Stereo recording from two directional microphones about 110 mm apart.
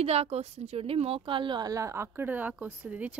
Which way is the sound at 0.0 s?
65° right (ahead or behind).